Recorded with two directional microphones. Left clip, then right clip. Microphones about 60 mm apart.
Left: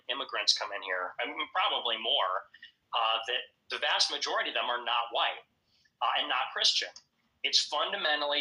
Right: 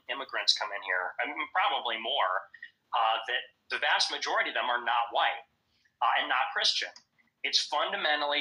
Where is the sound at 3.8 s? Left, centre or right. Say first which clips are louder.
Right 1 dB; right.